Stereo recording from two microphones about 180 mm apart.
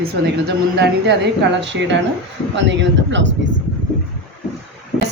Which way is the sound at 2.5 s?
90° right.